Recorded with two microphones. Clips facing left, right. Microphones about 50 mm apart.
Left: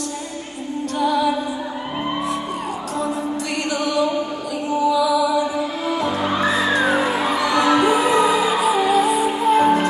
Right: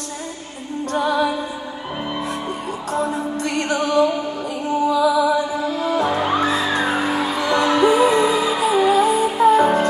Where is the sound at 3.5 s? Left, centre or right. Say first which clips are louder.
Right 4 dB; right.